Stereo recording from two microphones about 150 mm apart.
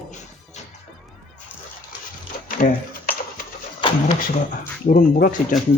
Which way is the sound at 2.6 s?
65° left (ahead or behind).